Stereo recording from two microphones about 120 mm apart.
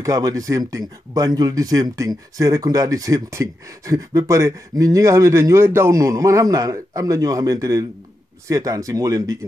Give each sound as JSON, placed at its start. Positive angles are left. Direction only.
{"t": 0.0, "sound": "speech", "side_deg": -30}